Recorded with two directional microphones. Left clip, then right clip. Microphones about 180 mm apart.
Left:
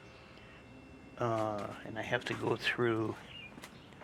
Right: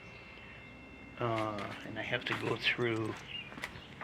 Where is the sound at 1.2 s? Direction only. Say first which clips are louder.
Left 1 dB; 15° left (ahead or behind).